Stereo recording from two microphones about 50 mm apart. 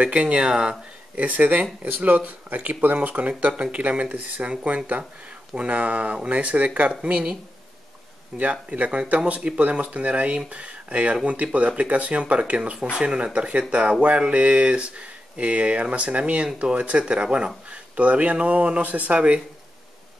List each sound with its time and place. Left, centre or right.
0.0 s speech: right
6.9 s speech: centre
8.4 s speech: right